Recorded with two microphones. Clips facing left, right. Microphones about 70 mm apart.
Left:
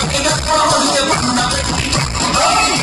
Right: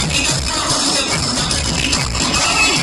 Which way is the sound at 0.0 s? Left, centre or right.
Left.